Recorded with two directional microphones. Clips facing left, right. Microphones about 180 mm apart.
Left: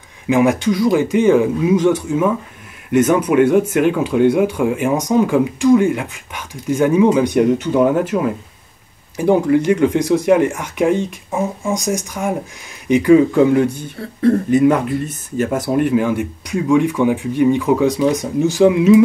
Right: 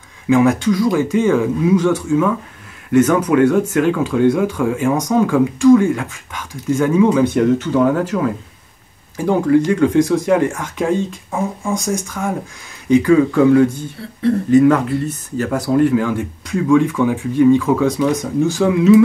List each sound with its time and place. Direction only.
0.3 s speech: 20° left (ahead or behind)